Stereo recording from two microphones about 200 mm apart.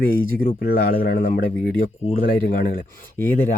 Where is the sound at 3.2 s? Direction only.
10° left (ahead or behind).